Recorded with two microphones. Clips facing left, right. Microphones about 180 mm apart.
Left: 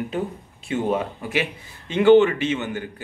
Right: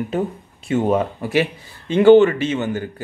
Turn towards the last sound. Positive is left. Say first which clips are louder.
# right 4 dB
turn(degrees=-40)  # may be behind; listen again after turning